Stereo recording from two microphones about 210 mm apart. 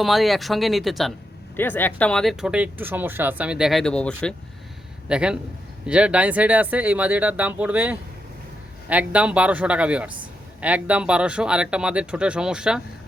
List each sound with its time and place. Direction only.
0.0 s speech: centre (ahead or behind)